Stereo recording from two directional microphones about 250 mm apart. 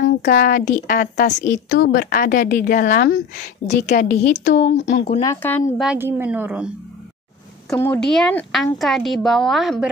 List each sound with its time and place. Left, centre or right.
0.0 s a woman's voice: left
5.2 s speech: centre
5.9 s speech: centre
7.7 s speech: centre